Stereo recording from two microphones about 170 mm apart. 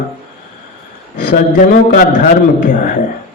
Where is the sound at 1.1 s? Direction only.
55° left (ahead or behind).